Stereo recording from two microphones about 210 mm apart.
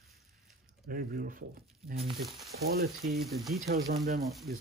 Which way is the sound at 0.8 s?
45° right (ahead or behind).